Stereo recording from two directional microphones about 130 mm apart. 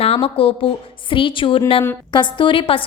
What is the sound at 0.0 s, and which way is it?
A woman's voice, 50° left (ahead or behind).